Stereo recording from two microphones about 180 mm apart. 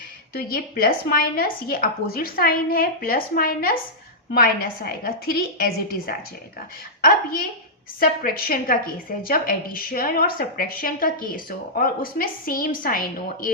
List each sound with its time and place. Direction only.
0.3 s a woman's voice: 55° left (ahead or behind)